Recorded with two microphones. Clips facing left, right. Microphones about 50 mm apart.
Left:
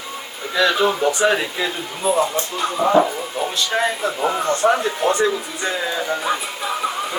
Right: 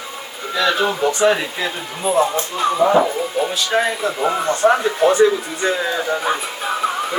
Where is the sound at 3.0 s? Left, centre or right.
Centre.